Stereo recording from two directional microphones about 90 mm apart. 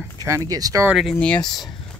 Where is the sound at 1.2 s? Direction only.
10° left (ahead or behind).